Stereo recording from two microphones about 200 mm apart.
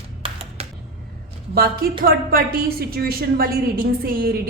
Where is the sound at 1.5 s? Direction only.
50° right (ahead or behind).